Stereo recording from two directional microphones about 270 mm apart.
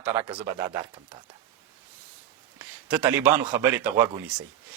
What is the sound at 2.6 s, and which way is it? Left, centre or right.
Speech, centre.